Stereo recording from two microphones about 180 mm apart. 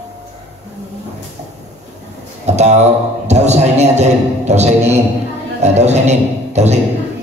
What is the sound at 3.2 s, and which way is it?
A man's voice, 40° right (ahead or behind).